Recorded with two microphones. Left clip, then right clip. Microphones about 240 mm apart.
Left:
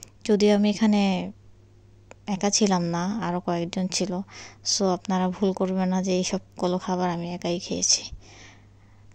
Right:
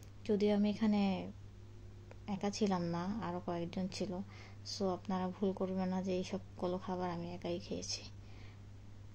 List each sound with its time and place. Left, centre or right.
0.0 s a woman's voice: left